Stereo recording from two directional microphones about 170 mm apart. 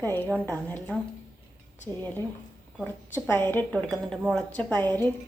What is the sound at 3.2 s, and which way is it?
Speech, 10° left (ahead or behind).